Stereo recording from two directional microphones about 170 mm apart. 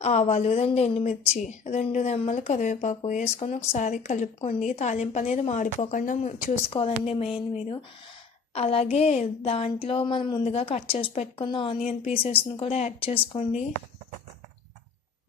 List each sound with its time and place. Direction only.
0.0 s a woman's voice: 40° left (ahead or behind)
6.7 s a woman's voice: 35° left (ahead or behind)